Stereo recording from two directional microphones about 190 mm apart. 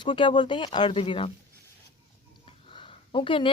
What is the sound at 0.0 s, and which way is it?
A woman's voice, 25° left (ahead or behind).